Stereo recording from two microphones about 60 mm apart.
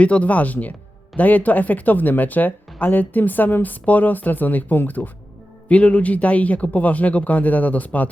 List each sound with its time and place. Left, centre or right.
0.0 s speech: left